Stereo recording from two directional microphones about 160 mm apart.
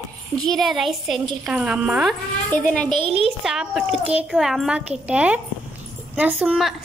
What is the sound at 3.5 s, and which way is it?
A child's voice, 5° right (ahead or behind).